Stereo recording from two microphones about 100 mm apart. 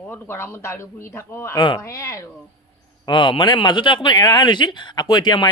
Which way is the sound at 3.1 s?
55° left (ahead or behind).